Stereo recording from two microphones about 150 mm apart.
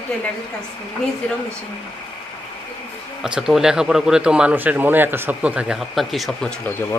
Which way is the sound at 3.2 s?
5° right (ahead or behind).